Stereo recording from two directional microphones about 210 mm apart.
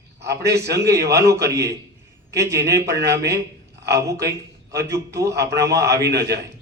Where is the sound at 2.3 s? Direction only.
15° right (ahead or behind).